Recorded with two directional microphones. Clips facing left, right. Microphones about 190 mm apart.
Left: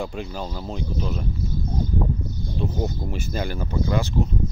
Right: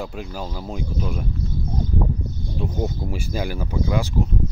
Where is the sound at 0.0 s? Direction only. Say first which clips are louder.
Left 1 dB; 5° right (ahead or behind).